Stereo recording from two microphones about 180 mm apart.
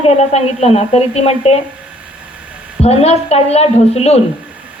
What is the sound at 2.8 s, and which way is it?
A woman's voice, 35° left (ahead or behind).